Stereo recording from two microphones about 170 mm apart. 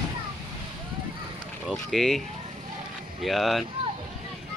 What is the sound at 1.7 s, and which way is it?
Speech, centre (ahead or behind).